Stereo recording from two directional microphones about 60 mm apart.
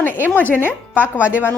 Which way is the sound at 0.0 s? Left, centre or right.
Left.